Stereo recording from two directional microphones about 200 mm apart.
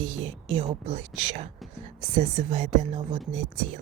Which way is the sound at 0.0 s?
30° right (ahead or behind).